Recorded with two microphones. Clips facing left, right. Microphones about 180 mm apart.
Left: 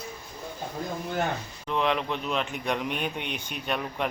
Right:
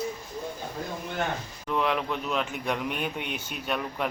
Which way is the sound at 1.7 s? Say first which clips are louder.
Even; 5° right (ahead or behind).